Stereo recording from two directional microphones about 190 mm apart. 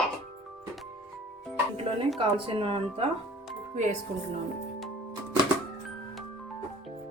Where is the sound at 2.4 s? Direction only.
30° right (ahead or behind).